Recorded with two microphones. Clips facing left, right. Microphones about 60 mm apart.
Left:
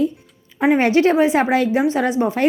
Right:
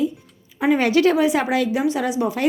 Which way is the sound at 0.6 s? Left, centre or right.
Left.